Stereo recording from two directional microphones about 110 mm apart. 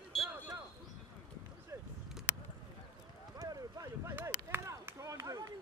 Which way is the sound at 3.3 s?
35° right (ahead or behind).